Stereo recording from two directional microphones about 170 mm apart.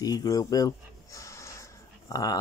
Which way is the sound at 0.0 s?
20° left (ahead or behind).